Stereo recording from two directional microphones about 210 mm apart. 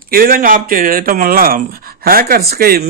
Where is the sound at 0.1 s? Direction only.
40° right (ahead or behind).